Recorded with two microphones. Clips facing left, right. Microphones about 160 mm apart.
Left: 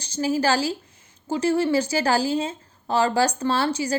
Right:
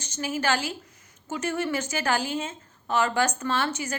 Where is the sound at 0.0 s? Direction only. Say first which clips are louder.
Left 6 dB; 35° left (ahead or behind).